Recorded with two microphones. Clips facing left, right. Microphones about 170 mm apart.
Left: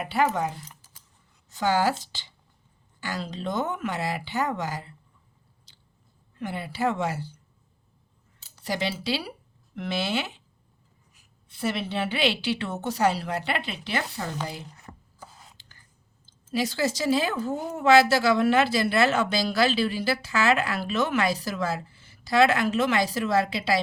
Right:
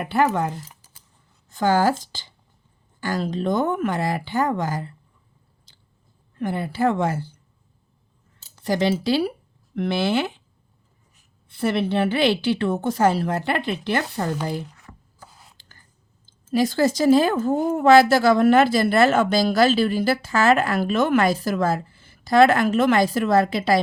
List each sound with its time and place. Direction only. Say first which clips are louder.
0.0 s a woman's voice: right 4 dB; 55° right (ahead or behind)
6.4 s a woman's voice: right 6 dB; 50° right (ahead or behind)
8.5 s speech: right 8 dB; 50° right (ahead or behind)
11.4 s a woman's voice: right 7 dB; 55° right (ahead or behind)
15.6 s a sound: right 2 dB; 45° right (ahead or behind)
16.2 s a woman's voice: right 7 dB; 50° right (ahead or behind)